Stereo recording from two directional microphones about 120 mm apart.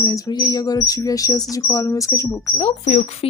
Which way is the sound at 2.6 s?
60° left (ahead or behind).